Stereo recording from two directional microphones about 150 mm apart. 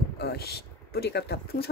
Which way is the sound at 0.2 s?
90° left.